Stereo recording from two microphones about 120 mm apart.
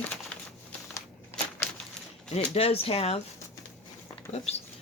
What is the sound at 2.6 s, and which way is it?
Speech, 55° left (ahead or behind).